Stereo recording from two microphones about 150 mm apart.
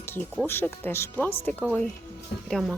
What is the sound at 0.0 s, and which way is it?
Music, 15° left (ahead or behind).